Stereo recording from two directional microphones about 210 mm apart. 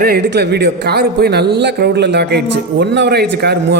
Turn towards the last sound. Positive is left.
turn(degrees=-50)  # may be behind; listen again after turning